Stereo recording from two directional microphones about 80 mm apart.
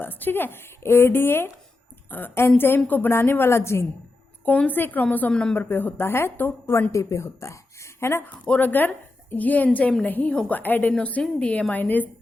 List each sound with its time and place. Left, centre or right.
0.0 s a woman's voice: left
4.4 s a woman's voice: centre
5.3 s a woman's voice: centre
5.5 s a woman's voice: left
6.9 s speech: left
8.2 s a woman's voice: left